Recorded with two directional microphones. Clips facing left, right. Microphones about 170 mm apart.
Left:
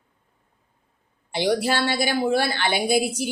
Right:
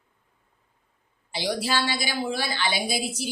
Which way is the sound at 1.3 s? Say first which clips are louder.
Left 5 dB; 55° left (ahead or behind).